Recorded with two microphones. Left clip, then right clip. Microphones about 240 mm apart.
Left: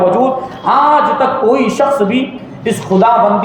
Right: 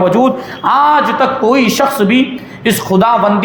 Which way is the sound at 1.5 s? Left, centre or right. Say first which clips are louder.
Even; right.